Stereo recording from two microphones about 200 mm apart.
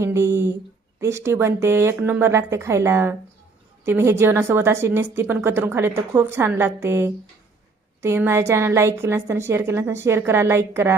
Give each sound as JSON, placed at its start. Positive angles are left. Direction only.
{"t": 0.0, "sound": "a woman's voice", "side_deg": -15}